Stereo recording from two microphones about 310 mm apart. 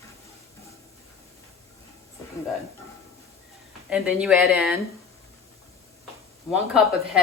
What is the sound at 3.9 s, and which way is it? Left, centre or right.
Speech, centre.